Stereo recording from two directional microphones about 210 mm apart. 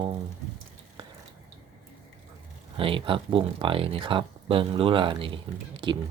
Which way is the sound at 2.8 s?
25° right (ahead or behind).